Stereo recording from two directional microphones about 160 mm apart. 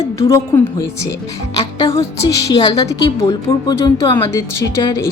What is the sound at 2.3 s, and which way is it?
A woman's voice, 25° left (ahead or behind).